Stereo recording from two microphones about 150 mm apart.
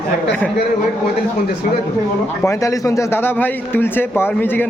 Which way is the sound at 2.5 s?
20° left (ahead or behind).